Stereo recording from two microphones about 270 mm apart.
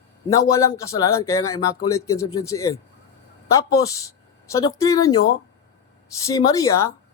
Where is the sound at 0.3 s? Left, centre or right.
Centre.